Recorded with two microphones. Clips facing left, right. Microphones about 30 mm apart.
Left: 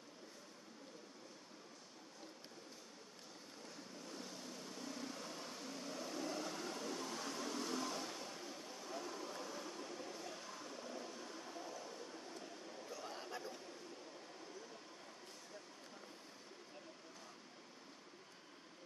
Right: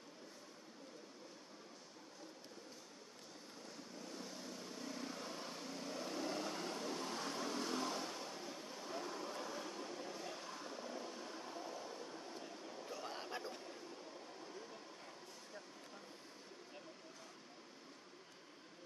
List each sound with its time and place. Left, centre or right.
4.2 s vehicle: centre
6.0 s vehicle: right
7.1 s vehicle: right
7.3 s vehicle: centre
8.8 s a sound: right
11.3 s vehicle: centre
12.8 s a sound: right